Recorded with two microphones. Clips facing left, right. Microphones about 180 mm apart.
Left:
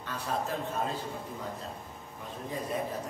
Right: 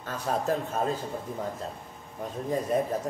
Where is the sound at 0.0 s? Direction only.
45° right (ahead or behind).